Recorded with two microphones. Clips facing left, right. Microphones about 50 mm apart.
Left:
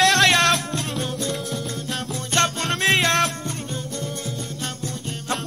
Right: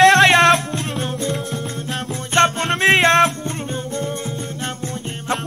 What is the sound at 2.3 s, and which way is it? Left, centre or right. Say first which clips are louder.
Music: right 6 dB; right.